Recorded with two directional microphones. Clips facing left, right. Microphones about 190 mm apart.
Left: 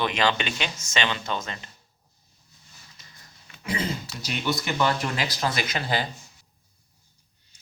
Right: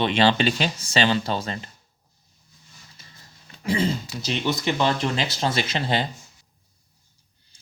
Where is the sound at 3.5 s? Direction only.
35° right (ahead or behind).